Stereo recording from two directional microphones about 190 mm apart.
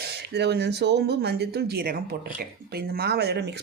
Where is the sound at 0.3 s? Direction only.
60° right (ahead or behind).